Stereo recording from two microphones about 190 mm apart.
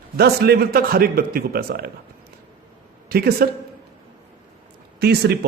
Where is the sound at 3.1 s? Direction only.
55° right (ahead or behind).